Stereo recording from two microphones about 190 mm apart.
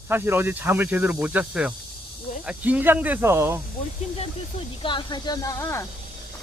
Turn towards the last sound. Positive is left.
turn(degrees=15)  # may be behind; listen again after turning